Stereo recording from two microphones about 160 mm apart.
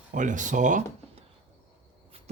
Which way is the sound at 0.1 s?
50° right (ahead or behind).